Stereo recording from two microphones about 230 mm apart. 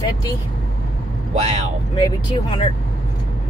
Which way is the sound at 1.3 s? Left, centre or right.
Right.